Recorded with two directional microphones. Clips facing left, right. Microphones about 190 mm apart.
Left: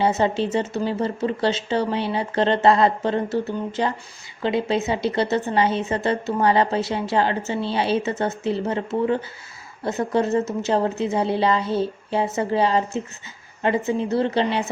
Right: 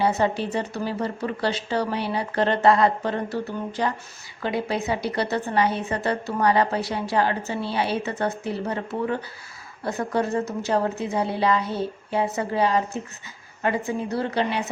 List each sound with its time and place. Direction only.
0.0 s a woman's voice: 25° left (ahead or behind)